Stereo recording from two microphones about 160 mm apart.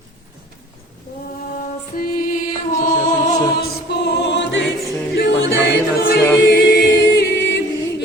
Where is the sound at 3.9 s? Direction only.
90° left.